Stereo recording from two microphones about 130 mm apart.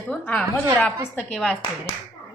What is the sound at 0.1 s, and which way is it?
Speech, 10° left (ahead or behind).